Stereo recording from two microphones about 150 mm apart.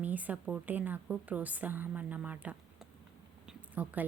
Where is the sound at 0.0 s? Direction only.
10° right (ahead or behind).